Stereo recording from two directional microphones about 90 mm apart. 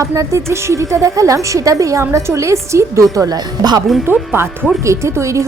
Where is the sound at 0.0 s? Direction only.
35° right (ahead or behind).